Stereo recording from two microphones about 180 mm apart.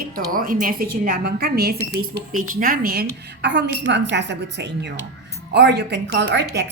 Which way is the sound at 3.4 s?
70° right (ahead or behind).